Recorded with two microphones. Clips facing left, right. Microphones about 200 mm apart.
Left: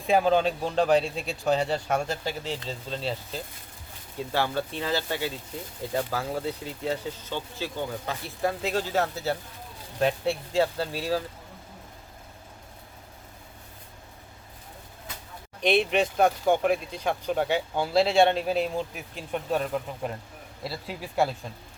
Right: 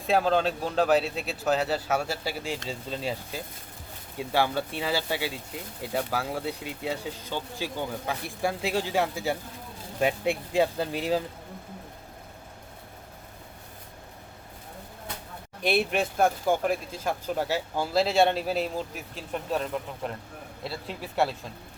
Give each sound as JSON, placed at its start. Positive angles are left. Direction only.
{"t": 0.1, "sound": "a man's voice", "side_deg": 5}
{"t": 15.6, "sound": "a man's voice", "side_deg": -5}
{"t": 20.7, "sound": "a man's voice", "side_deg": 5}